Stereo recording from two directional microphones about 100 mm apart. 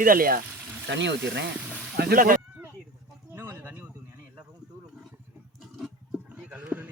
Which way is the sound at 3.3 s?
25° right (ahead or behind).